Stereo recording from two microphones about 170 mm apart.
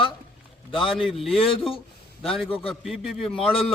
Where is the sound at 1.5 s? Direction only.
30° left (ahead or behind).